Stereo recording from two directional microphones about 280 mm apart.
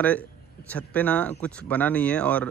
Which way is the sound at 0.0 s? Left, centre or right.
Centre.